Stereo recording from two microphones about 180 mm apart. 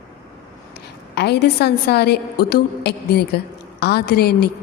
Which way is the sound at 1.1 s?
70° left (ahead or behind).